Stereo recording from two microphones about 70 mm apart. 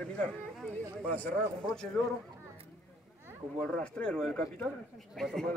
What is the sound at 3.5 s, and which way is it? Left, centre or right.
Speech, centre.